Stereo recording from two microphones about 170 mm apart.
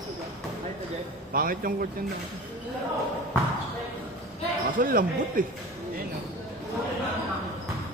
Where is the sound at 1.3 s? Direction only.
55° right (ahead or behind).